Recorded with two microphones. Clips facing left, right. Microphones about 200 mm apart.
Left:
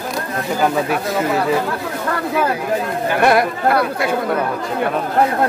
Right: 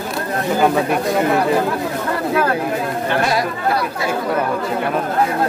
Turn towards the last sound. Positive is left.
turn(degrees=55)  # may be behind; listen again after turning